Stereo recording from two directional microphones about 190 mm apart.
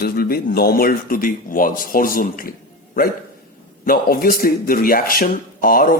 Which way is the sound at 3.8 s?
50° left (ahead or behind).